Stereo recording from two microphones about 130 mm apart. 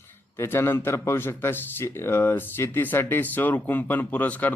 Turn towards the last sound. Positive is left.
turn(degrees=15)  # may be behind; listen again after turning